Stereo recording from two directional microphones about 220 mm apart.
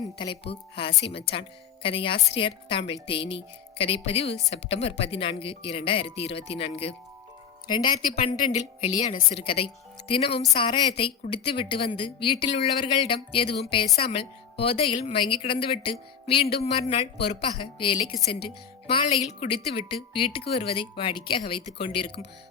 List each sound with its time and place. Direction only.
0.2 s a woman's voice: 25° left (ahead or behind)
8.0 s a woman's voice: 35° left (ahead or behind)